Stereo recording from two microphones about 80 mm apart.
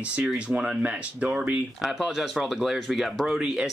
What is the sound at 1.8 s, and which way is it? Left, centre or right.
Speech, centre.